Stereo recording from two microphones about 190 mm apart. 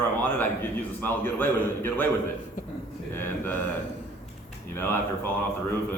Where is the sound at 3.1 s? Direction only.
10° left (ahead or behind).